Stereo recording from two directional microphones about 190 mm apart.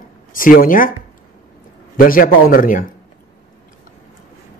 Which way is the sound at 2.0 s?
45° left (ahead or behind).